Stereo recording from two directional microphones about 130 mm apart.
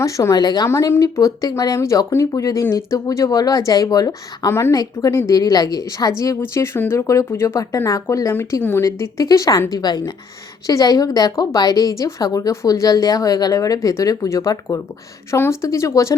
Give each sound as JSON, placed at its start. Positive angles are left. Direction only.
{"t": 0.0, "sound": "speech", "side_deg": 25}